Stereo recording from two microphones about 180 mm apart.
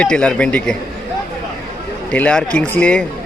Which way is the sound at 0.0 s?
5° left (ahead or behind).